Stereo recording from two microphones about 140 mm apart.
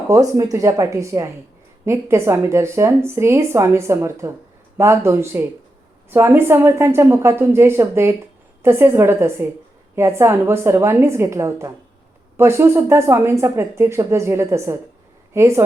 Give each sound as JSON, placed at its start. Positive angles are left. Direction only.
{"t": 0.1, "sound": "a woman's voice", "side_deg": -25}